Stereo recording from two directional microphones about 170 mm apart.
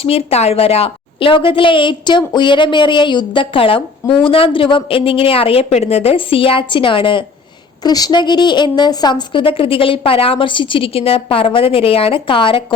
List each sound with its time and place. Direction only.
0.0 s a woman's voice: 35° left (ahead or behind)